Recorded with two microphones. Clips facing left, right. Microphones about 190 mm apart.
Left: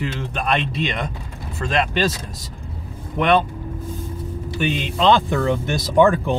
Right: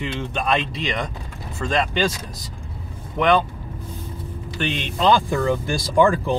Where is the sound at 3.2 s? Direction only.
Centre (ahead or behind).